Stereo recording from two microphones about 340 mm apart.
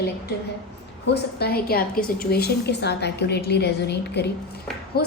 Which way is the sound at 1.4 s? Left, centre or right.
Left.